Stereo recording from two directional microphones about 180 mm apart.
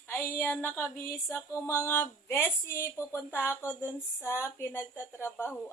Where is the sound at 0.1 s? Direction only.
10° left (ahead or behind).